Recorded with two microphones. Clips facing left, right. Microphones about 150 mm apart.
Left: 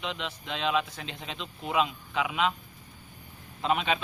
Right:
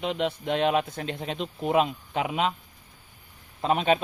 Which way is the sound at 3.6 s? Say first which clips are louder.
Right 4 dB; 40° right (ahead or behind).